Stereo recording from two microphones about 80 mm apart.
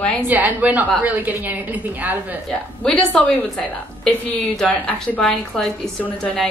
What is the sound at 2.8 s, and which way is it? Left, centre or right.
A woman's voice, centre.